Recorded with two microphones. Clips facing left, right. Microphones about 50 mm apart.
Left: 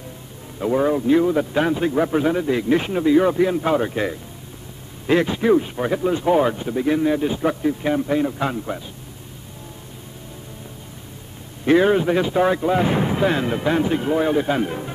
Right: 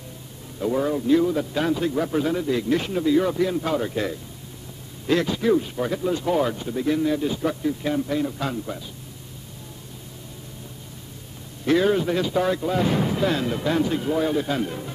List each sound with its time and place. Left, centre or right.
0.6 s speech: left
11.6 s speech: left